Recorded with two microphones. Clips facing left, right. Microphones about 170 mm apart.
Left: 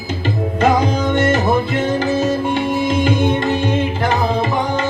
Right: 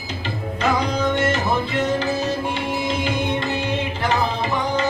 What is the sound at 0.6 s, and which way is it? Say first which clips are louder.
Music: left 5 dB; 50° left (ahead or behind).